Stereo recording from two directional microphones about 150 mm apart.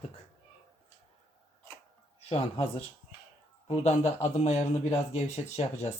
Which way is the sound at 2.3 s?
35° left (ahead or behind).